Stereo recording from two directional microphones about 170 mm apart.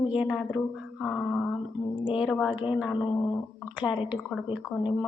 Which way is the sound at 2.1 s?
Centre (ahead or behind).